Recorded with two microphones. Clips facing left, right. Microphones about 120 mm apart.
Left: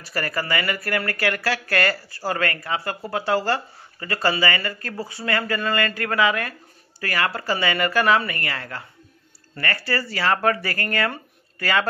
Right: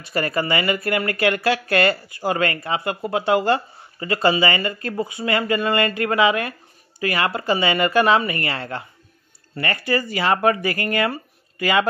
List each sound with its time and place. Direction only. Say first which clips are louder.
0.0 s speech: right 5 dB; 20° right (ahead or behind)